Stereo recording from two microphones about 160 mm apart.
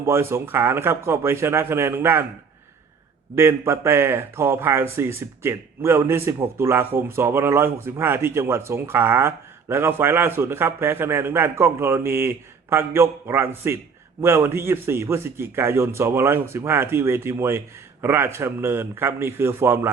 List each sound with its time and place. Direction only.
0.0 s a man's voice: 15° right (ahead or behind)
3.3 s a man's voice: 15° right (ahead or behind)